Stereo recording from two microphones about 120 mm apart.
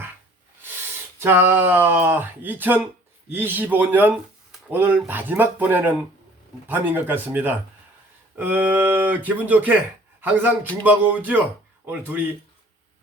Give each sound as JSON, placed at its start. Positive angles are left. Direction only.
{"t": 1.2, "sound": "speech", "side_deg": -15}